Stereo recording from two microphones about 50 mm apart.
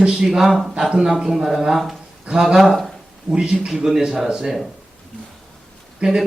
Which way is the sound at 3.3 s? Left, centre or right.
Centre.